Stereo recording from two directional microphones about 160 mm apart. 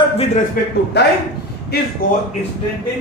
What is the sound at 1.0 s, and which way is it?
Speech, 90° left.